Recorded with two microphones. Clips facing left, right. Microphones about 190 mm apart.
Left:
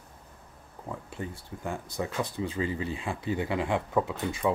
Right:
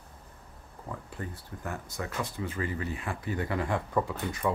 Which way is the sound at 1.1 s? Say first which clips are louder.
Left 2 dB; 25° left (ahead or behind).